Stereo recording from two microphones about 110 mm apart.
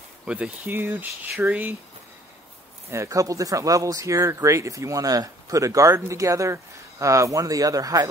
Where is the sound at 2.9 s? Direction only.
30° right (ahead or behind).